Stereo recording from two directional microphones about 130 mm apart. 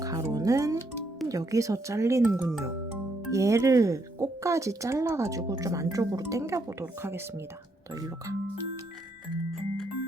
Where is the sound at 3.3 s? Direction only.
25° right (ahead or behind).